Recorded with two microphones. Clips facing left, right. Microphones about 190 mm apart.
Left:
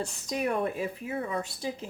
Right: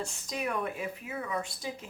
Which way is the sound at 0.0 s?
35° left (ahead or behind).